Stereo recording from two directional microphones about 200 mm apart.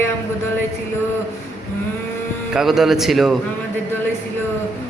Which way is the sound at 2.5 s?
Centre (ahead or behind).